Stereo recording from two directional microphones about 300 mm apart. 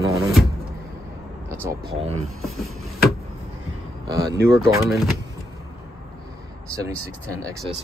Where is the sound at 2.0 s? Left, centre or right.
Right.